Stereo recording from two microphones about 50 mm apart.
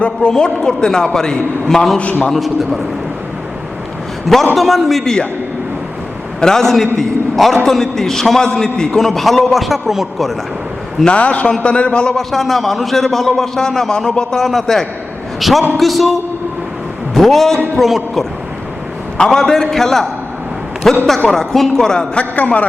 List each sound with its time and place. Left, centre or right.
0.0 s a man's voice: left; by 2.8 s centre
4.5 s a man's voice: centre
6.4 s a man's voice: centre
11.0 s a man's voice: left
12.1 s a man's voice: centre
17.2 s a man's voice: centre
19.1 s a man's voice: centre
22.2 s a man's voice: left